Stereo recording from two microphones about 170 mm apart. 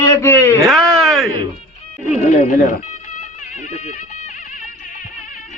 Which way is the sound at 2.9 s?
45° left (ahead or behind).